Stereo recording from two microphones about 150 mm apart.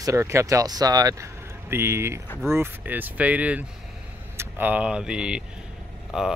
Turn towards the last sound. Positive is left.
turn(degrees=-5)  # may be behind; listen again after turning